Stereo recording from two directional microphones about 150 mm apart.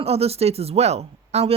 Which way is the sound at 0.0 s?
40° right (ahead or behind).